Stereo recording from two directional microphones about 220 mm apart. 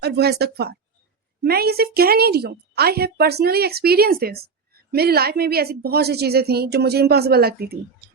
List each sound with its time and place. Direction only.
0.0 s a woman's voice: 45° right (ahead or behind)